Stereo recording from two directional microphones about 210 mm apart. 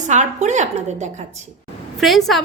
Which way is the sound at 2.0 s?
Centre (ahead or behind).